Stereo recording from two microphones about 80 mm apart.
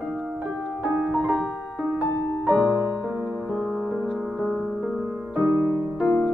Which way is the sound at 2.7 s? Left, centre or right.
Centre.